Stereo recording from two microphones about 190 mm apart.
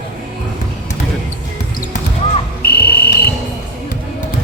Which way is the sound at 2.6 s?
55° left (ahead or behind).